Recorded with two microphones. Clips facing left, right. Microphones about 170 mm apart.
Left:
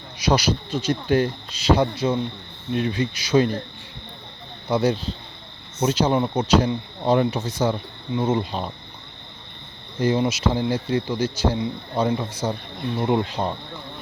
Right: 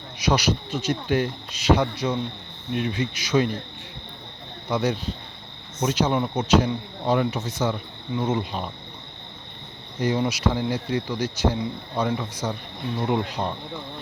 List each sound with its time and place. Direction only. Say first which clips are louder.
0.2 s speech: left 2 dB; 30° left (ahead or behind)
4.7 s speech: left 3 dB; 30° left (ahead or behind)
10.0 s speech: left 2 dB; 25° left (ahead or behind)